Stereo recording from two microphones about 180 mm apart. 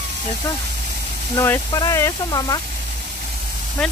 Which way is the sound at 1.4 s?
15° left (ahead or behind).